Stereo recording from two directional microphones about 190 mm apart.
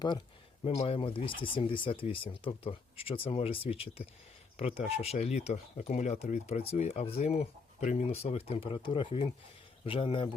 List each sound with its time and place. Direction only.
0.6 s speech: 30° left (ahead or behind)